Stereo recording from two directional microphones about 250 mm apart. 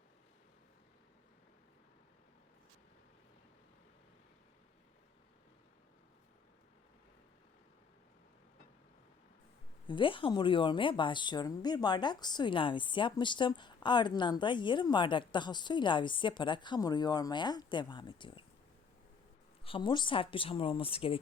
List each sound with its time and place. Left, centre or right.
9.8 s speech: centre
19.6 s speech: centre